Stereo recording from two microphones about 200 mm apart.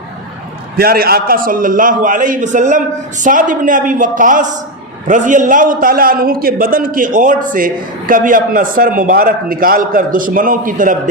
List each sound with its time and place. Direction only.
0.8 s a man's voice: 50° right (ahead or behind)